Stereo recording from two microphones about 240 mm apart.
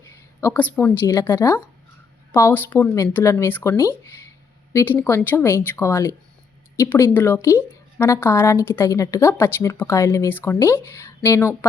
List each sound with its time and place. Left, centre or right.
0.1 s a woman's voice: centre